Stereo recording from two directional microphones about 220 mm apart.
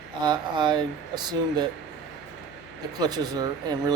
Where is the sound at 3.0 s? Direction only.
15° right (ahead or behind).